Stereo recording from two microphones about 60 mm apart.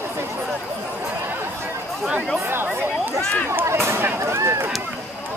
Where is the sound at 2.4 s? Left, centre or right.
Right.